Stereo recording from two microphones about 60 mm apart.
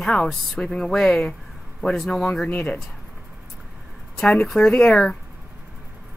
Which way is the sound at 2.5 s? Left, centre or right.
Left.